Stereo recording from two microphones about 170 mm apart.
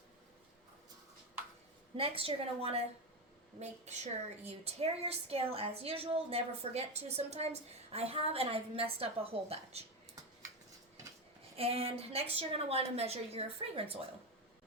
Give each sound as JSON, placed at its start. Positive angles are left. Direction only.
{"t": 2.0, "sound": "a woman's voice", "side_deg": -35}
{"t": 11.5, "sound": "a woman's voice", "side_deg": -35}